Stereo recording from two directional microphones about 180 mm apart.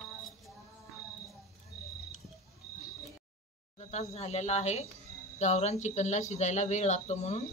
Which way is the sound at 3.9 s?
35° left (ahead or behind).